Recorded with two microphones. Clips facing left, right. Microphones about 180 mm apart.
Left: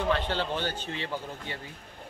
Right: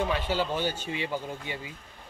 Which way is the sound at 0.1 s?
10° right (ahead or behind).